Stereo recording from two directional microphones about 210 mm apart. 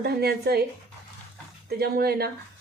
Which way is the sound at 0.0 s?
50° right (ahead or behind).